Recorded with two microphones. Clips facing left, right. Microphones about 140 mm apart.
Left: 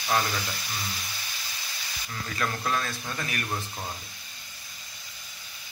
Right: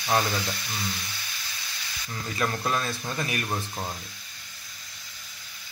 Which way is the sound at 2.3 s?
20° right (ahead or behind).